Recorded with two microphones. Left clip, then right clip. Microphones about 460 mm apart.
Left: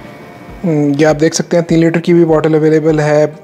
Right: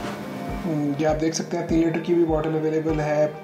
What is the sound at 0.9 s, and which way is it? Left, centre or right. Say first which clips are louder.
Speech: left 12 dB; left.